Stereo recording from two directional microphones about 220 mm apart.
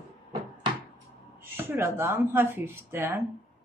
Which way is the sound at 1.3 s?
10° right (ahead or behind).